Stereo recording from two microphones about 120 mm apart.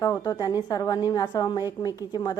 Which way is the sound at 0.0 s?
30° left (ahead or behind).